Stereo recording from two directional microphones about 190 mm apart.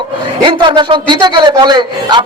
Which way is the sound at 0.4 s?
25° right (ahead or behind).